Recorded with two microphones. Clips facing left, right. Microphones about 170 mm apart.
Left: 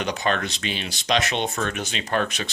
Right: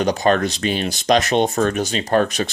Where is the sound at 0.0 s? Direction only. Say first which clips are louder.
Right 8 dB; 40° right (ahead or behind).